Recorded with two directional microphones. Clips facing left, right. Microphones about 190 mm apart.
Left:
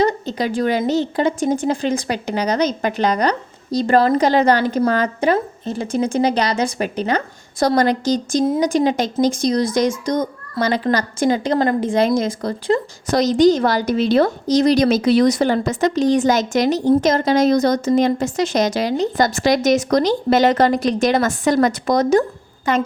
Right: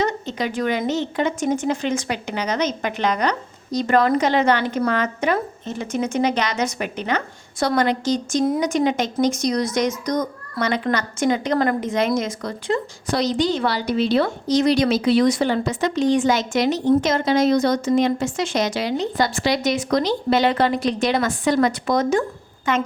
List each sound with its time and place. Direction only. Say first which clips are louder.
0.0 s speech: left 4 dB; 35° left (ahead or behind)